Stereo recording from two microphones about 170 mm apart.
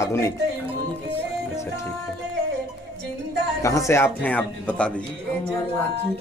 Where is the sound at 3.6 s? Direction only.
20° left (ahead or behind).